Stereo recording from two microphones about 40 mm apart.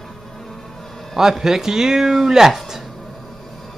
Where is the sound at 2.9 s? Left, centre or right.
Centre.